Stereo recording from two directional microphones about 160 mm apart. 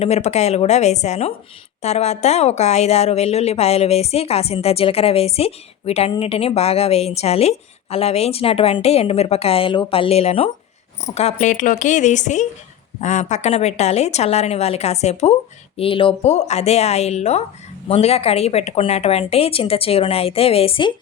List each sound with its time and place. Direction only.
0.0 s a woman's voice: 45° left (ahead or behind)
15.8 s a woman's voice: 35° left (ahead or behind)